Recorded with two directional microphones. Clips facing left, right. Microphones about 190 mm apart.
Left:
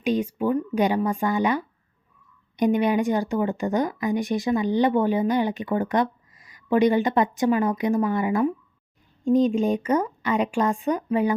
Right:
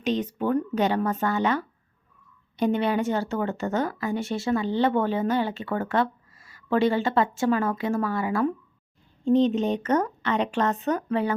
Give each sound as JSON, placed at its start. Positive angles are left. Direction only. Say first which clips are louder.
{"t": 0.0, "sound": "speech", "louder": "left 2 dB", "side_deg": 10}